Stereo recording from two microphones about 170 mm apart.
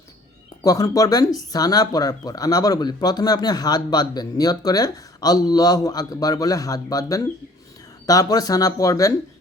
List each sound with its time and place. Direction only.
0.6 s speech: 20° left (ahead or behind)